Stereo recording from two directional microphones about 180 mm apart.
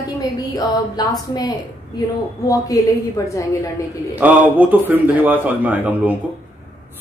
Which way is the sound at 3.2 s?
15° left (ahead or behind).